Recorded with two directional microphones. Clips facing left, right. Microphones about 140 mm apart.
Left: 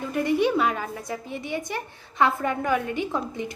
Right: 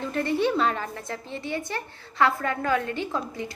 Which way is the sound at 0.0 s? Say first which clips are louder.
Left 2 dB; 10° left (ahead or behind).